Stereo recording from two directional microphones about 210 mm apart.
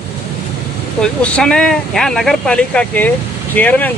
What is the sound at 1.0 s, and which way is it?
Speech, 5° left (ahead or behind).